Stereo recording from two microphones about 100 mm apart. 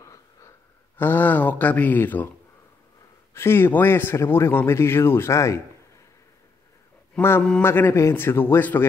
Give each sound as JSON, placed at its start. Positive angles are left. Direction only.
{"t": 0.0, "sound": "wheeze", "side_deg": 30}
{"t": 0.9, "sound": "speech", "side_deg": 20}
{"t": 3.3, "sound": "speech", "side_deg": 25}
{"t": 7.2, "sound": "speech", "side_deg": 20}